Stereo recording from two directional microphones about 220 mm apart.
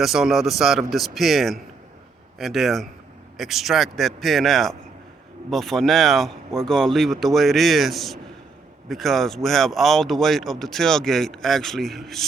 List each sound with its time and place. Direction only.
0.0 s speech: centre (ahead or behind)